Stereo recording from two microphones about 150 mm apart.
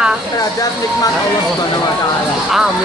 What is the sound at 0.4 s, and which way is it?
Speech, 25° left (ahead or behind).